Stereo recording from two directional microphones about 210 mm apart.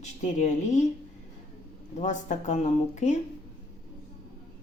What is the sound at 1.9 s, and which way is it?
Speech, 35° left (ahead or behind).